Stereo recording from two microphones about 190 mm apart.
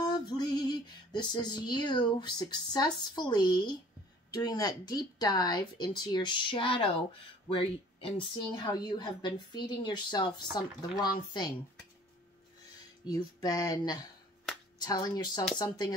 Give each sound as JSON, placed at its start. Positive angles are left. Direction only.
{"t": 0.0, "sound": "female singing", "side_deg": 20}
{"t": 4.3, "sound": "a woman's voice", "side_deg": 20}
{"t": 13.0, "sound": "a woman's voice", "side_deg": 20}